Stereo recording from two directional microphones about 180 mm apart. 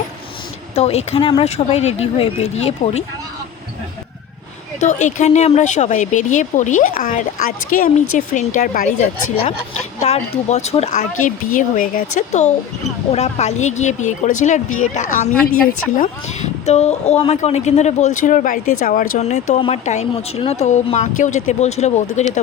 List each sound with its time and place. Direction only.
0.8 s speech: 35° left (ahead or behind)
4.8 s speech: 40° left (ahead or behind)
9.5 s speech: 35° left (ahead or behind)
11.5 s speech: 50° left (ahead or behind)
19.2 s speech: 35° left (ahead or behind)